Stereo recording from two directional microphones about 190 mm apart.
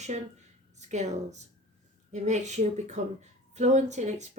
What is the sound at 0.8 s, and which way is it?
Speech, 35° right (ahead or behind).